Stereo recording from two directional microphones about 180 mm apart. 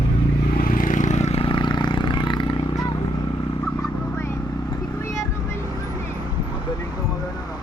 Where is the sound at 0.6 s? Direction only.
50° left (ahead or behind); by 2.4 s 25° left (ahead or behind).